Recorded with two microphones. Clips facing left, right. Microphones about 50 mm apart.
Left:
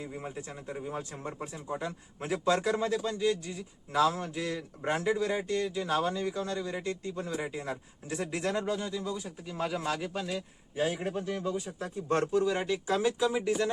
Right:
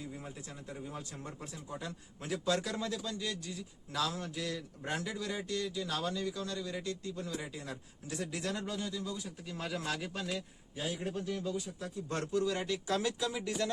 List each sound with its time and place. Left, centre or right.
0.0 s a man's voice: left; by 10.4 s centre
10.8 s speech: left; by 13.7 s centre